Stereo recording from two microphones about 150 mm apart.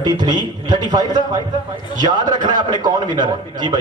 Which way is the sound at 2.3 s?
30° right (ahead or behind).